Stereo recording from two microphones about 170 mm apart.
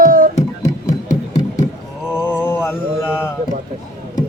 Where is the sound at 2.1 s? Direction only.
15° left (ahead or behind).